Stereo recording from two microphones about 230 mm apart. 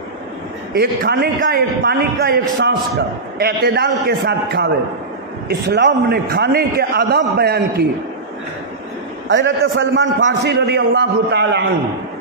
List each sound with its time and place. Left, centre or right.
0.7 s a man's voice: right
9.3 s a man's voice: right